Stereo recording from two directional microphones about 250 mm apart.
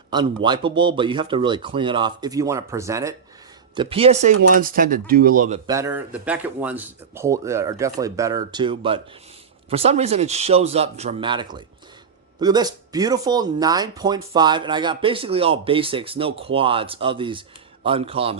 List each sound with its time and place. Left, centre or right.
0.1 s speech: centre; by 5.5 s right
5.6 s speech: centre